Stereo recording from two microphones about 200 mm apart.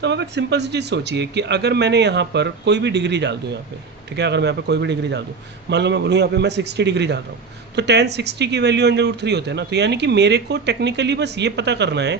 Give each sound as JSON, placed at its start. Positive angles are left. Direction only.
{"t": 0.0, "sound": "speech", "side_deg": -60}